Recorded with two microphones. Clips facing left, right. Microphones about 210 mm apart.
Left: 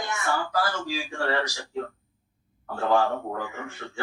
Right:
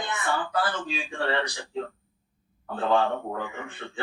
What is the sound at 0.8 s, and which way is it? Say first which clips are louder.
A man's voice: left 1 dB; 20° right (ahead or behind).